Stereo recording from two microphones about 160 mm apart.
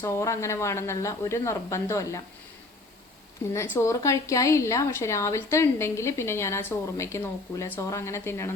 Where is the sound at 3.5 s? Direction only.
15° left (ahead or behind).